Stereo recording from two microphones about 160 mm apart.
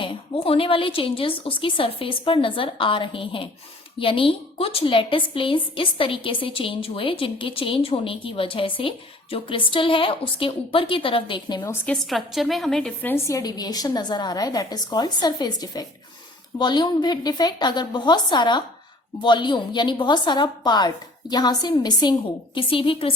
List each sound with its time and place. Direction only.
0.0 s a woman's voice: 35° left (ahead or behind)
12.0 s a woman's voice: centre (ahead or behind); by 23.1 s 35° left (ahead or behind)